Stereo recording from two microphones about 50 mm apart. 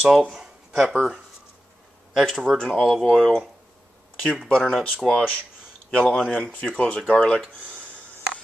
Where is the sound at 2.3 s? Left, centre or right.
Centre.